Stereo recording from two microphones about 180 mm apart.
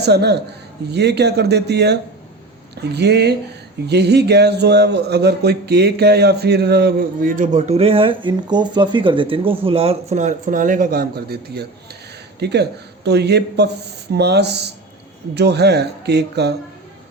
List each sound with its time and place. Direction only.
0.0 s speech: 65° right (ahead or behind)